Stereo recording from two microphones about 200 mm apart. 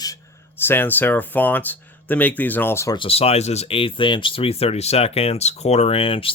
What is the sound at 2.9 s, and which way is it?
Speech, 30° left (ahead or behind).